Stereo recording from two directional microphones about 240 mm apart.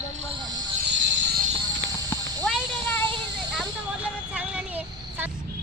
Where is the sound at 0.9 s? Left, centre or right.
Right.